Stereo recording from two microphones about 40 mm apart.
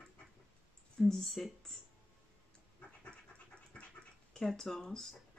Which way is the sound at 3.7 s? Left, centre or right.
Left.